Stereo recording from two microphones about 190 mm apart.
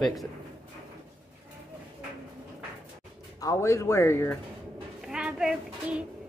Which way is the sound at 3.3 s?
15° left (ahead or behind).